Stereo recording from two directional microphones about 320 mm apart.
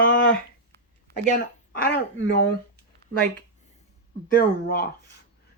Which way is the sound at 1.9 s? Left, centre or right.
Left.